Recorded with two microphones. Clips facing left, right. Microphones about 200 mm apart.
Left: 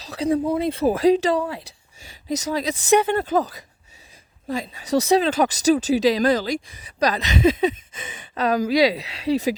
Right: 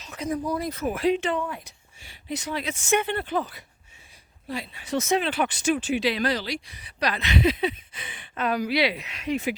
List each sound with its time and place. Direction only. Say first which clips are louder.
0.0 s speech: left 7 dB; 35° left (ahead or behind)
1.6 s a sound: left 4 dB; 40° left (ahead or behind)
2.6 s speech: left 7 dB; 35° left (ahead or behind)